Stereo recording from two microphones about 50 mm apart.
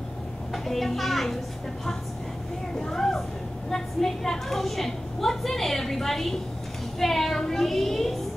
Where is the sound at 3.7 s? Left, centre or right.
Centre.